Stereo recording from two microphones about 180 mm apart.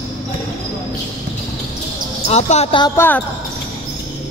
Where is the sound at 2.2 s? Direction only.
35° left (ahead or behind).